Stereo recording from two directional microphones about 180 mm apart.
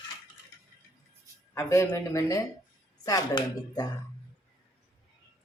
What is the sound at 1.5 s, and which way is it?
Speech, 15° left (ahead or behind).